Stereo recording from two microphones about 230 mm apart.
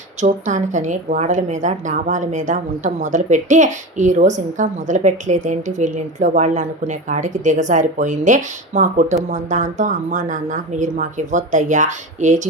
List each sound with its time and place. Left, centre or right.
0.2 s a woman's voice: right